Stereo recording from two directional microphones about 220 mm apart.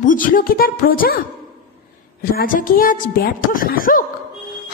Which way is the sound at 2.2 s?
40° left (ahead or behind).